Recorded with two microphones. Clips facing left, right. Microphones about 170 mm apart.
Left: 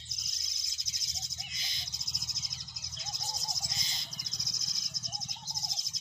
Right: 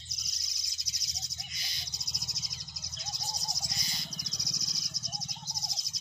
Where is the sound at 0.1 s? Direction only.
50° left (ahead or behind).